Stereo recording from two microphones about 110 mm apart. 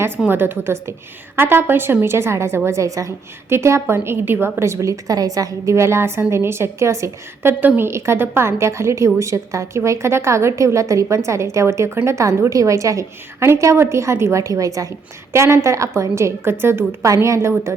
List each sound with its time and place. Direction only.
0.3 s a woman's voice: 20° right (ahead or behind)